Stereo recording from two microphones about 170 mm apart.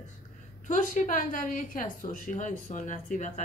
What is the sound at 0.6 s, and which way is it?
A woman's voice, 45° left (ahead or behind).